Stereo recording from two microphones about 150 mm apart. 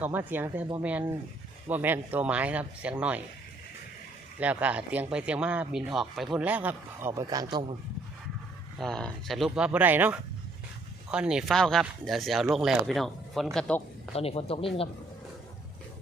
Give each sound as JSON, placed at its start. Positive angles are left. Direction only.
{"t": 0.0, "sound": "speech", "side_deg": -10}
{"t": 4.4, "sound": "speech", "side_deg": -10}
{"t": 8.8, "sound": "speech", "side_deg": 5}
{"t": 14.1, "sound": "speech", "side_deg": 40}